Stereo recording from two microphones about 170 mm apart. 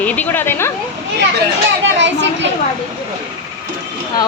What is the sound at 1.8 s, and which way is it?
Children playing, 90° right.